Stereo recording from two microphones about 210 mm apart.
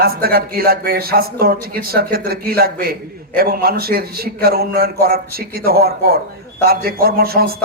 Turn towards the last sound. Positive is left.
turn(degrees=-45)  # may be behind; listen again after turning